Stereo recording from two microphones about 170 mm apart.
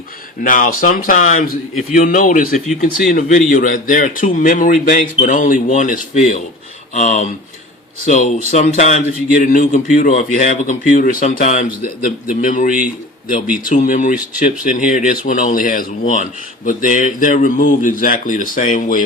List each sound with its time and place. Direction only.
0.4 s speech: 50° left (ahead or behind)